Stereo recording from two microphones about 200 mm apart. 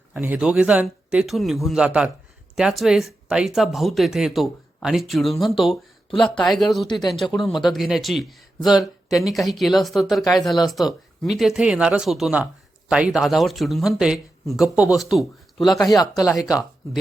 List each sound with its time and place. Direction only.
0.1 s speech: 5° right (ahead or behind)
6.8 s speech: 20° left (ahead or behind)
7.1 s speech: centre (ahead or behind)
15.8 s speech: 20° left (ahead or behind)